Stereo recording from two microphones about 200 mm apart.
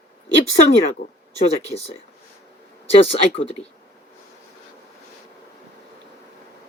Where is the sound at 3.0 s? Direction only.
30° left (ahead or behind).